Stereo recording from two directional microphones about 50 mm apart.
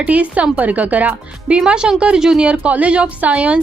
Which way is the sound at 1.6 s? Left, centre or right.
Centre.